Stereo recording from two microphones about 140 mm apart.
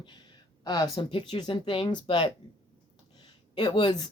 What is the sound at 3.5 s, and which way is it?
Speech, 30° left (ahead or behind).